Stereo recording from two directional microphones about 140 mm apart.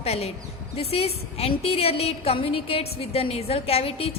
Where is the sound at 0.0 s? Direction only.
45° left (ahead or behind).